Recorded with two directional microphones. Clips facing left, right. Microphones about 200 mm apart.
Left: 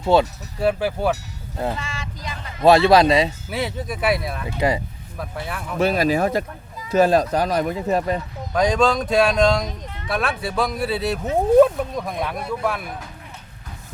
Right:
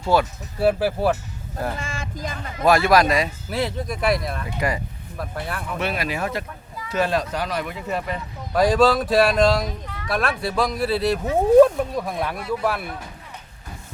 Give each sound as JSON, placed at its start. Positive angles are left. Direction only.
{"t": 0.0, "sound": "speech", "side_deg": 25}
{"t": 0.6, "sound": "speech", "side_deg": -5}
{"t": 1.8, "sound": "speech", "side_deg": -50}
{"t": 2.6, "sound": "speech", "side_deg": 25}
{"t": 3.5, "sound": "speech", "side_deg": 0}
{"t": 4.4, "sound": "speech", "side_deg": 25}
{"t": 5.1, "sound": "speech", "side_deg": 0}
{"t": 5.8, "sound": "speech", "side_deg": 40}
{"t": 8.5, "sound": "speech", "side_deg": -5}